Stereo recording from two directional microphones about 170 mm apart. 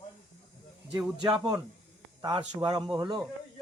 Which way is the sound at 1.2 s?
25° right (ahead or behind).